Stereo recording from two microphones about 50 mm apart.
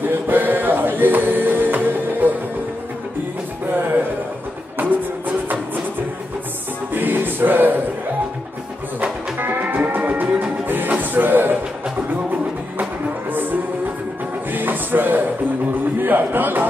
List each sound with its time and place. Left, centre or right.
0.1 s music: right
4.8 s music: right
6.9 s music: right
9.4 s music: right